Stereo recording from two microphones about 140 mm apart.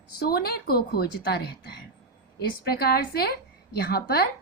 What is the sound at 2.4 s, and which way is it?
A woman's voice, 90° left.